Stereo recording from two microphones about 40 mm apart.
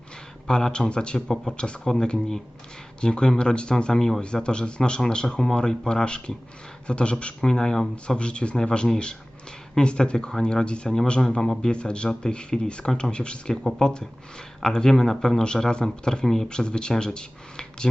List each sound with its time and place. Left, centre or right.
0.4 s speech: centre
16.5 s speech: left